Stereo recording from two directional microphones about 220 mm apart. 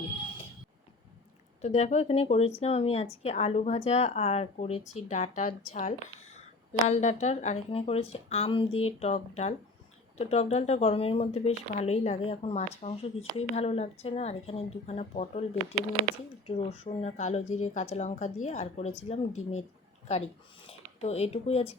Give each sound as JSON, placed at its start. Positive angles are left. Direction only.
{"t": 1.6, "sound": "a woman's voice", "side_deg": 30}
{"t": 16.5, "sound": "a woman's voice", "side_deg": 25}